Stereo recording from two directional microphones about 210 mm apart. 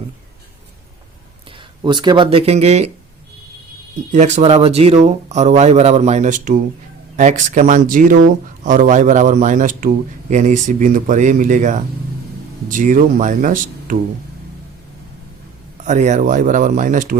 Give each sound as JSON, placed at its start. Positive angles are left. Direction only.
{"t": 1.8, "sound": "speech", "side_deg": -20}
{"t": 4.1, "sound": "speech", "side_deg": -35}
{"t": 15.8, "sound": "speech", "side_deg": -35}